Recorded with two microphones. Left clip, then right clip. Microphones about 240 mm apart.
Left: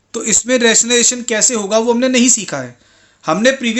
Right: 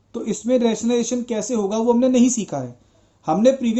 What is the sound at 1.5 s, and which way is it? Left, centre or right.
Speech, left.